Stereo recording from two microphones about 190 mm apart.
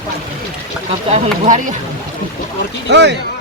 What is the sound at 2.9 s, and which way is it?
Speech, 65° right (ahead or behind).